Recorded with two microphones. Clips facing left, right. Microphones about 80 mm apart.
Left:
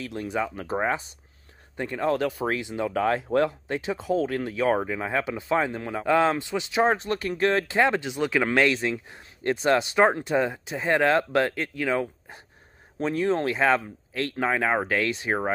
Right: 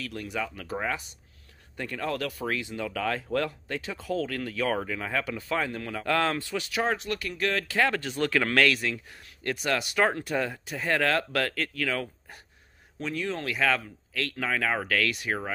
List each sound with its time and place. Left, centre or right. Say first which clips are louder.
0.0 s speech: left 5 dB; left